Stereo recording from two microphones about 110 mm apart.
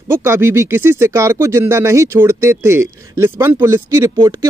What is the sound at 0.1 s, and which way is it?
Speech, 25° right (ahead or behind).